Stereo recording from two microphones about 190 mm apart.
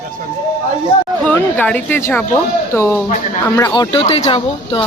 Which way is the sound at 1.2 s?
5° left (ahead or behind).